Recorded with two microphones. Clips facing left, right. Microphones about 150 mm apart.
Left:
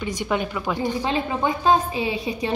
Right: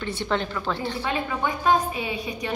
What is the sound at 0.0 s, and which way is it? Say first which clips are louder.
Speech: left 2 dB; 10° left (ahead or behind).